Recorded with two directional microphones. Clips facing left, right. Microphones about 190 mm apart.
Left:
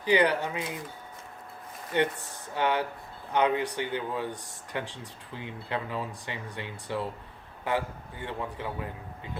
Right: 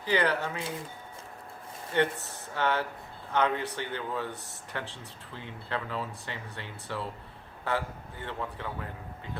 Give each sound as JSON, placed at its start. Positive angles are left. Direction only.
{"t": 0.0, "sound": "speech", "side_deg": 15}
{"t": 1.9, "sound": "speech", "side_deg": 15}